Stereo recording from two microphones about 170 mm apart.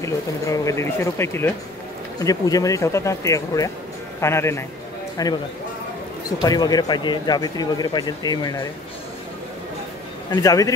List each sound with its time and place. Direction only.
0.0 s speech: 20° left (ahead or behind)
6.4 s speech: 20° left (ahead or behind)
10.3 s speech: 20° left (ahead or behind)